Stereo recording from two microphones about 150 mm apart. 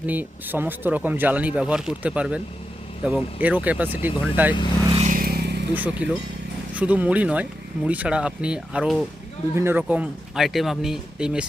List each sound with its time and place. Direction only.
0.0 s speech: 10° right (ahead or behind)
5.0 s vehicle: 75° right (ahead or behind); by 5.6 s 90° right
5.7 s speech: 10° right (ahead or behind)